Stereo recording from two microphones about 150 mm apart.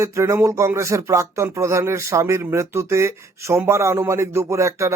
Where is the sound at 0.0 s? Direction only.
20° right (ahead or behind).